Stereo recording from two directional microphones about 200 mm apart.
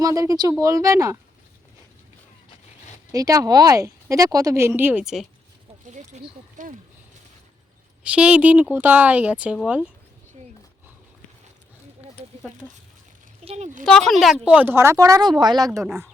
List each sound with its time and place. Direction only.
0.0 s a woman's voice: 15° right (ahead or behind)
3.1 s a woman's voice: 15° right (ahead or behind)
5.8 s speech: 35° right (ahead or behind)
8.0 s a woman's voice: 5° right (ahead or behind)
13.4 s speech: 30° right (ahead or behind)
13.8 s a woman's voice: centre (ahead or behind); by 15.9 s 15° right (ahead or behind)